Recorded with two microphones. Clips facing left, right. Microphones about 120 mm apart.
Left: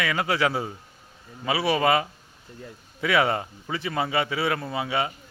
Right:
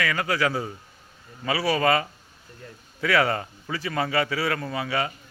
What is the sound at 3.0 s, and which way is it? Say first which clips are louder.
A man's voice: even; 20° left (ahead or behind).